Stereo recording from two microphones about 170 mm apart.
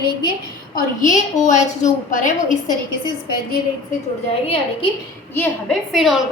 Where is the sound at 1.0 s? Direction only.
45° left (ahead or behind).